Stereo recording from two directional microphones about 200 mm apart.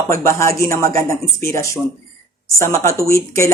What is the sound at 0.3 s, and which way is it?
Speech, 15° left (ahead or behind).